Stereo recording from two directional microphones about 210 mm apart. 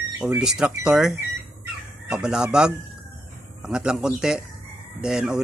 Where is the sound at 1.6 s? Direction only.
5° right (ahead or behind).